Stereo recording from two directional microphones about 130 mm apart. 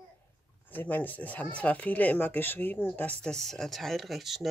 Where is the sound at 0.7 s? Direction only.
15° left (ahead or behind).